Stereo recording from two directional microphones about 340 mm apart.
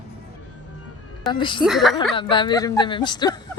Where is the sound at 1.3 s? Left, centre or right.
Centre.